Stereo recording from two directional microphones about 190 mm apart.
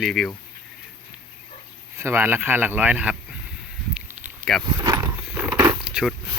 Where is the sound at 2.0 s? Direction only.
10° right (ahead or behind).